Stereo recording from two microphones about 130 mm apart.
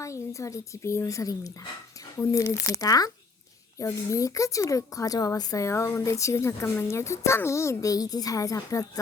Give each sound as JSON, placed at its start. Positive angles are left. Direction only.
{"t": 0.0, "sound": "a woman's voice", "side_deg": 25}